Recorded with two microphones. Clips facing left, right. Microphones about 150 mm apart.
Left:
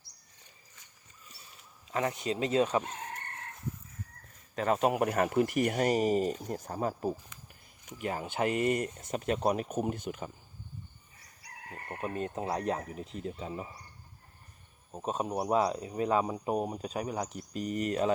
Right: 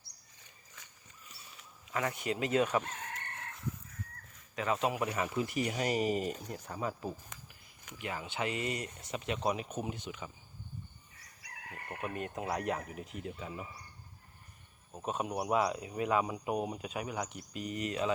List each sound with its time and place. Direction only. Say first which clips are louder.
1.9 s speech: left 3 dB; 30° left (ahead or behind)
4.5 s speech: left 5 dB; 45° left (ahead or behind)
7.3 s a sound: right 2 dB; 45° right (ahead or behind)
7.9 s speech: left 5 dB; 45° left (ahead or behind)
11.4 s speech: left 2 dB; 30° left (ahead or behind)
15.0 s speech: left 3 dB; 35° left (ahead or behind)